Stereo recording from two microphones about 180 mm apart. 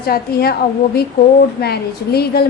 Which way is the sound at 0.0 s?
60° left (ahead or behind).